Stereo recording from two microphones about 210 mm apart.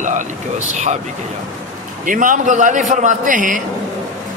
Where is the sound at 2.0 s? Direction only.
40° right (ahead or behind).